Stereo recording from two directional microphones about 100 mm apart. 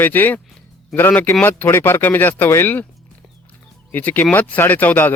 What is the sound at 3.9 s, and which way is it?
Speech, 15° left (ahead or behind).